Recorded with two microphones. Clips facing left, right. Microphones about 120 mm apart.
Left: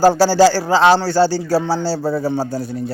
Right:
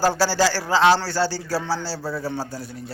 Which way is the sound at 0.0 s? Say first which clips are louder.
Left 8 dB; 25° left (ahead or behind).